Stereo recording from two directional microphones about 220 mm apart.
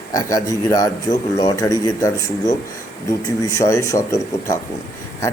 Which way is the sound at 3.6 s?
15° left (ahead or behind).